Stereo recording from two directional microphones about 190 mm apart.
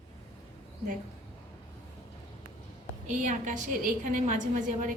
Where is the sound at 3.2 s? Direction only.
40° right (ahead or behind).